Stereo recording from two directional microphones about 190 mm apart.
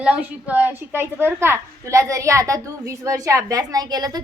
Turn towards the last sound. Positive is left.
turn(degrees=-20)  # may be behind; listen again after turning